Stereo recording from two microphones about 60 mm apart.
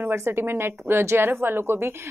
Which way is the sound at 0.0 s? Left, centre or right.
Right.